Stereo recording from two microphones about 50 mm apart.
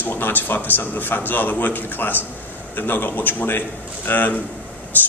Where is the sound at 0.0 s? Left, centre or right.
Left.